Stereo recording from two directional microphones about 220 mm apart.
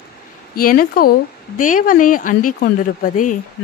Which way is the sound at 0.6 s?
40° left (ahead or behind).